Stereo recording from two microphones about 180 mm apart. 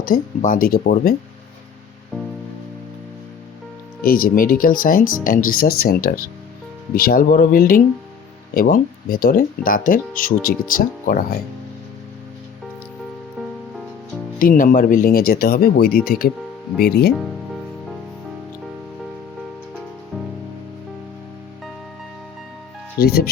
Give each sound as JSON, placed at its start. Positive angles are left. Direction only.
{"t": 0.0, "sound": "speech", "side_deg": 50}
{"t": 4.0, "sound": "speech", "side_deg": 55}
{"t": 14.3, "sound": "speech", "side_deg": 50}
{"t": 23.0, "sound": "speech", "side_deg": 60}